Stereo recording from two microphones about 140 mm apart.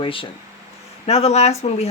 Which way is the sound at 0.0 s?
40° left (ahead or behind).